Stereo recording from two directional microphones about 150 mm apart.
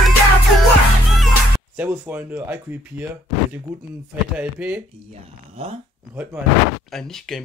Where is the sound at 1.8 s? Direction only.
10° right (ahead or behind).